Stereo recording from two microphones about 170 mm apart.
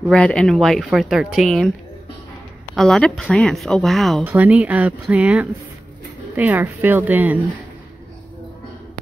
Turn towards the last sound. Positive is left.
turn(degrees=-10)  # may be behind; listen again after turning